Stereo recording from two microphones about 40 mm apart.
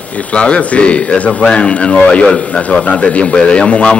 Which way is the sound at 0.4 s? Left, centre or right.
Left.